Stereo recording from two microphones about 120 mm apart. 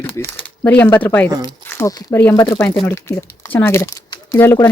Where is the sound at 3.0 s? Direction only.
25° left (ahead or behind).